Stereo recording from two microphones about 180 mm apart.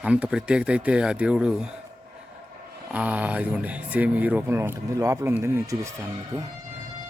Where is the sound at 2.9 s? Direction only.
10° right (ahead or behind).